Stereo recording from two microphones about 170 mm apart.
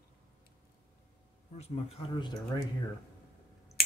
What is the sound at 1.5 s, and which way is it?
Speech, 40° left (ahead or behind).